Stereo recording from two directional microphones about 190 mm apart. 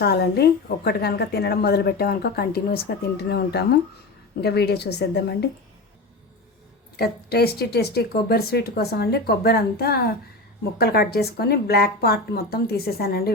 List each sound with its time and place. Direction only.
0.0 s a woman's voice: 60° left (ahead or behind)
6.9 s a woman's voice: 55° left (ahead or behind)